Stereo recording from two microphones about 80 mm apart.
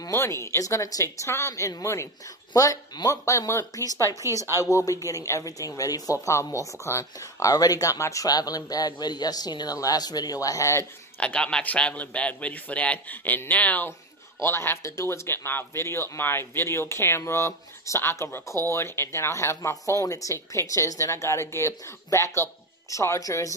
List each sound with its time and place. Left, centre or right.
0.1 s speech: left
11.1 s a man's voice: centre
14.4 s speech: left